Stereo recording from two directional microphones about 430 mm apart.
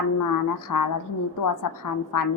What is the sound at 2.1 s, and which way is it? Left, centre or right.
Speech, left.